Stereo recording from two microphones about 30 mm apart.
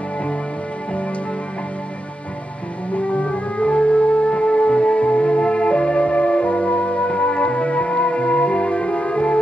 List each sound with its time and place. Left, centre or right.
2.9 s music: left